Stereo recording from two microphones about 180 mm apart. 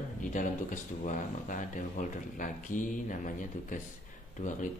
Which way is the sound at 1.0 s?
45° left (ahead or behind).